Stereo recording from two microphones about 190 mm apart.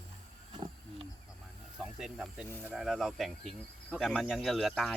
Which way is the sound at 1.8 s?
5° right (ahead or behind).